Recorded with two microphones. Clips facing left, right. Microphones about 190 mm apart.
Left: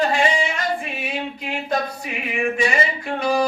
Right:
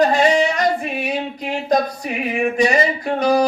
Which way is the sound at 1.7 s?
40° right (ahead or behind).